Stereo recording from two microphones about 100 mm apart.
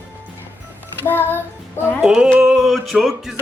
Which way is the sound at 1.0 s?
20° left (ahead or behind).